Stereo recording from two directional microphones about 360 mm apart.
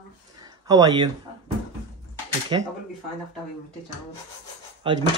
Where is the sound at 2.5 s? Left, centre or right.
Centre.